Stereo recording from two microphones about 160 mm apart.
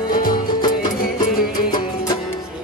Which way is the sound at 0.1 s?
60° left (ahead or behind).